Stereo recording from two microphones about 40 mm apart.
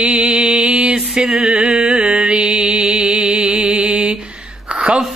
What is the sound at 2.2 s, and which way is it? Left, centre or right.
Mantra, right.